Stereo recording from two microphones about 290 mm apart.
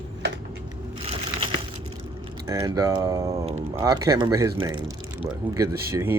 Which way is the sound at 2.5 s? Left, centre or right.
Centre.